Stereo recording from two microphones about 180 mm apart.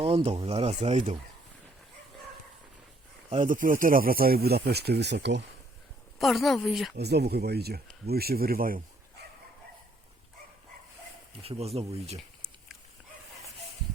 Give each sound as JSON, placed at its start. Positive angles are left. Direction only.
{"t": 0.0, "sound": "speech", "side_deg": -30}
{"t": 3.3, "sound": "speech", "side_deg": -50}
{"t": 6.1, "sound": "speech", "side_deg": 0}
{"t": 6.9, "sound": "speech", "side_deg": -65}
{"t": 11.4, "sound": "speech", "side_deg": -35}